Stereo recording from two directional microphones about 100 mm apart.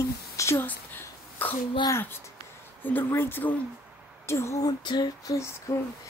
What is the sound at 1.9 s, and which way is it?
A woman's voice, 20° left (ahead or behind).